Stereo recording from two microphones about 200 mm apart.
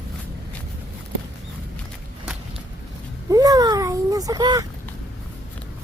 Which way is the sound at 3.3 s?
20° right (ahead or behind).